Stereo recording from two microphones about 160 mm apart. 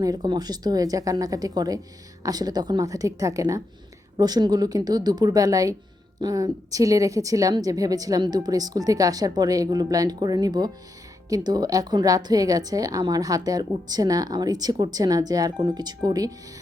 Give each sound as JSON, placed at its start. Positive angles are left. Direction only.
{"t": 0.0, "sound": "a woman's voice", "side_deg": -25}